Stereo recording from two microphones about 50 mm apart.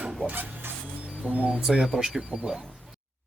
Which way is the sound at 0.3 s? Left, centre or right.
Right.